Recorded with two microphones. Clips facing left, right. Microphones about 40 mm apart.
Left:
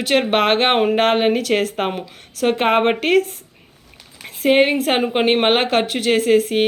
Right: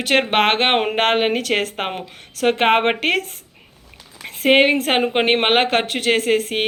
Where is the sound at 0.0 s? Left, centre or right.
Right.